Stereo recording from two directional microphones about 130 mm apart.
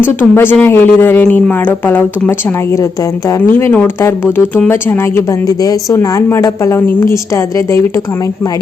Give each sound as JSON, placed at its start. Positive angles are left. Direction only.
{"t": 0.0, "sound": "a woman's voice", "side_deg": 15}